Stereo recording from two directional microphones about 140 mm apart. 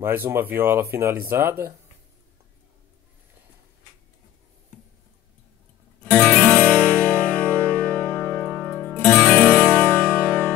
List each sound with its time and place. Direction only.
0.0 s speech: 15° right (ahead or behind)
6.1 s music: 10° left (ahead or behind)